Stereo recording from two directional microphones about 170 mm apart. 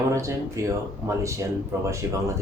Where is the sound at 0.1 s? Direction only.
15° right (ahead or behind).